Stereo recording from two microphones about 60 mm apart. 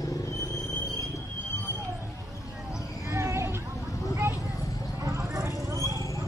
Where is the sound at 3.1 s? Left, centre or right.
Right.